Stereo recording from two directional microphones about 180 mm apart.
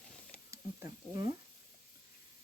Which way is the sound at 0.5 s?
15° right (ahead or behind).